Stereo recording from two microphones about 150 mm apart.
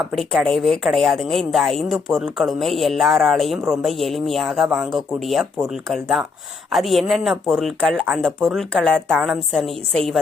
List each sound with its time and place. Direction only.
0.1 s a woman's voice: centre (ahead or behind)